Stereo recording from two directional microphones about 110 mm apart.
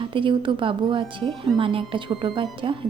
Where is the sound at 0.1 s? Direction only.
50° right (ahead or behind).